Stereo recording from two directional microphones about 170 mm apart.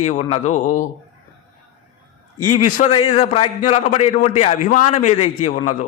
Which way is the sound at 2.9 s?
40° left (ahead or behind).